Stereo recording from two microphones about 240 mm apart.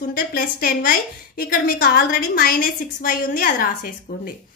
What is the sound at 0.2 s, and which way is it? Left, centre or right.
A woman's voice, left.